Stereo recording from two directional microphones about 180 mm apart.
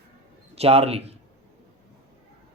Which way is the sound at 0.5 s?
35° right (ahead or behind).